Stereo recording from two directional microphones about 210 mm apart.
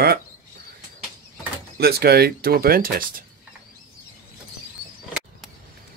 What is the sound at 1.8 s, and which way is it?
Speech, 50° right (ahead or behind).